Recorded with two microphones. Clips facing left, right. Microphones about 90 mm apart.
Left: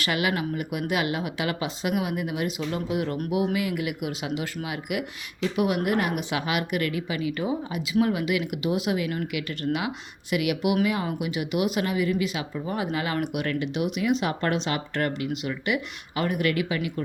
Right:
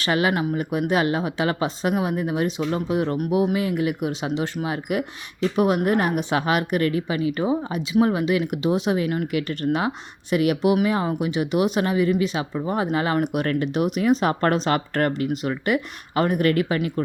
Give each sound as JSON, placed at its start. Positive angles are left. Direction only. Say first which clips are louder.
{"t": 0.0, "sound": "speech", "louder": "right 5 dB", "side_deg": -35}